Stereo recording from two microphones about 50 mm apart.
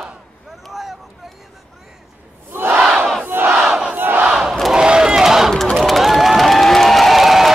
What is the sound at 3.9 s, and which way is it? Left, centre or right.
Battle cry, right.